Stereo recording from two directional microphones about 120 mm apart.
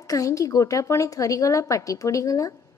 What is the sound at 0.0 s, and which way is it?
A woman's voice, 30° left (ahead or behind).